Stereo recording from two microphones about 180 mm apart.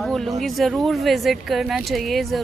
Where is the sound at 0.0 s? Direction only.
Centre (ahead or behind).